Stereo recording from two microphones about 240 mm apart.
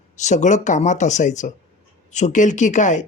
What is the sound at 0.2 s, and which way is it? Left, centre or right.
Speech, left.